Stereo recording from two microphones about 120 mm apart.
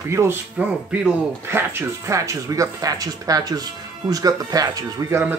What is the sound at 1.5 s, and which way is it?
Speech, 25° right (ahead or behind).